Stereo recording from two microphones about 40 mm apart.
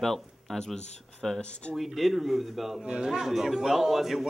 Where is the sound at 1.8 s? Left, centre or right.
Centre.